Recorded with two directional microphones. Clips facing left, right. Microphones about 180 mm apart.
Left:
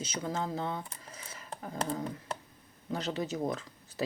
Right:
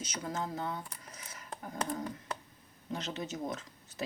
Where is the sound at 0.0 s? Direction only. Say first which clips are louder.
Left 3 dB; 30° left (ahead or behind).